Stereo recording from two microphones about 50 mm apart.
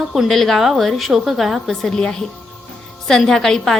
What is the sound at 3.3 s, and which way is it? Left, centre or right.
Speech, centre.